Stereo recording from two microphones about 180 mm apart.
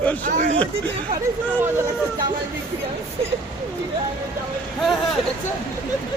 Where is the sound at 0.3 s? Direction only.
45° right (ahead or behind).